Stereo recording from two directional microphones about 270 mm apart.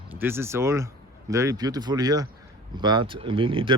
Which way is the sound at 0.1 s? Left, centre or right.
Centre.